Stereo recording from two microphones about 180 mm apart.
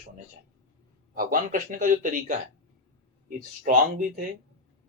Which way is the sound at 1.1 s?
50° right (ahead or behind).